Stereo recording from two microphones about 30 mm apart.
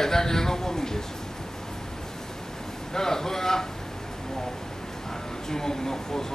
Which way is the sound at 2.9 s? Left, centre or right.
Centre.